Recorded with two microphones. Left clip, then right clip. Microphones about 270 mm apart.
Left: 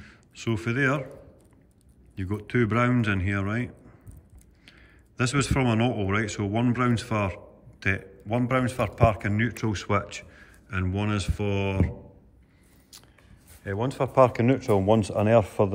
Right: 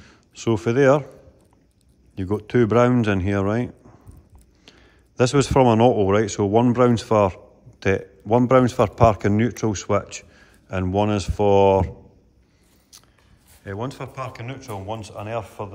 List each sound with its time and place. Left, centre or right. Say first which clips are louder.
0.0 s a sound: right 7 dB; centre
2.1 s a man's voice: right 7 dB; centre
13.7 s speech: left 3 dB; centre
14.1 s a man's voice: left 13 dB; left